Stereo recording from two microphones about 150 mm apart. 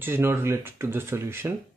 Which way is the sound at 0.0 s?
15° right (ahead or behind).